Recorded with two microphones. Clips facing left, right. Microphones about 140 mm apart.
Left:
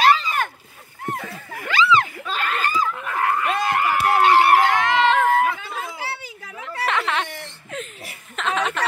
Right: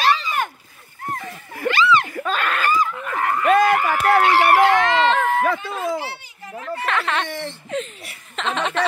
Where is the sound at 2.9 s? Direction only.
Centre (ahead or behind).